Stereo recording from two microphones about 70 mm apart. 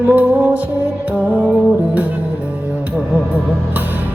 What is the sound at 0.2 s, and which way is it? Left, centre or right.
Music, right.